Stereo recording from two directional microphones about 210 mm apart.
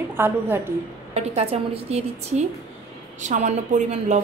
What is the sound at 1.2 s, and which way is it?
A woman's voice, 30° right (ahead or behind).